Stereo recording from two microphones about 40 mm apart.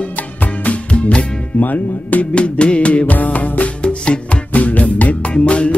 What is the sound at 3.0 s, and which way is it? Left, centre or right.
Music, left.